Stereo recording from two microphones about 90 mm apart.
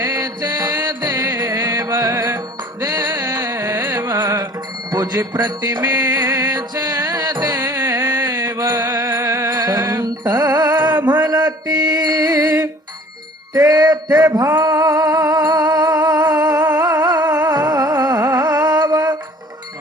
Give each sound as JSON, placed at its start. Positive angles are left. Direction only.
{"t": 0.0, "sound": "music", "side_deg": -45}
{"t": 2.8, "sound": "music", "side_deg": -45}
{"t": 3.2, "sound": "music", "side_deg": -30}
{"t": 4.9, "sound": "music", "side_deg": -45}
{"t": 7.8, "sound": "music", "side_deg": -25}
{"t": 8.3, "sound": "mantra", "side_deg": -30}
{"t": 9.0, "sound": "music", "side_deg": -35}
{"t": 9.5, "sound": "music", "side_deg": -45}
{"t": 11.3, "sound": "mantra", "side_deg": -50}
{"t": 13.5, "sound": "a sound", "side_deg": -45}
{"t": 14.6, "sound": "music", "side_deg": -40}